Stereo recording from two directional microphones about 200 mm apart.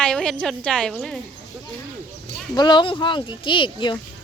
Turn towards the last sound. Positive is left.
turn(degrees=25)  # may be behind; listen again after turning